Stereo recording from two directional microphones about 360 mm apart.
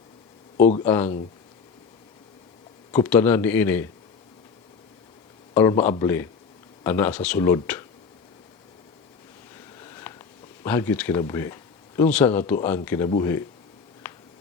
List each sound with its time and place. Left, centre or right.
0.5 s speech: left
0.9 s speech: centre
2.9 s speech: centre
5.5 s speech: centre
9.8 s speech: centre